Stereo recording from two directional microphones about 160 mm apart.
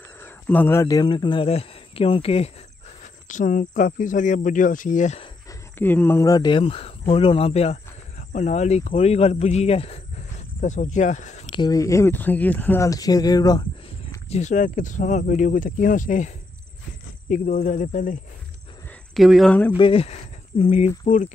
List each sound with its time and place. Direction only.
0.2 s speech: 10° left (ahead or behind); by 2.5 s 40° left (ahead or behind)
3.3 s speech: 55° left (ahead or behind)
5.5 s speech: 10° left (ahead or behind); by 11.5 s 50° left (ahead or behind)
11.5 s speech: 25° left (ahead or behind)
13.8 s speech: 45° left (ahead or behind)
17.3 s speech: 50° left (ahead or behind)
19.1 s speech: centre (ahead or behind)
19.8 s speech: 35° left (ahead or behind)